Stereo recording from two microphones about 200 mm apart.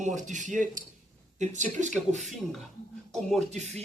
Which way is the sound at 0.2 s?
40° right (ahead or behind).